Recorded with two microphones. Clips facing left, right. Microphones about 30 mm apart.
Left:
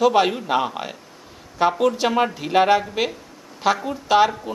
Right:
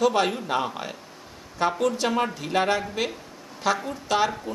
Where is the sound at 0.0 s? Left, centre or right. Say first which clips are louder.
Left 5 dB; centre.